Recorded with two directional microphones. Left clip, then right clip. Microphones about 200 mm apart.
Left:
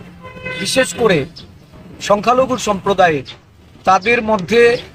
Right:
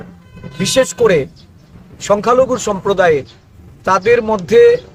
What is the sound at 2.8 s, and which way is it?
A man's voice, 25° right (ahead or behind).